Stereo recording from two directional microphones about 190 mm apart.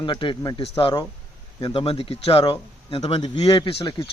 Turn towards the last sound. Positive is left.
turn(degrees=25)  # may be behind; listen again after turning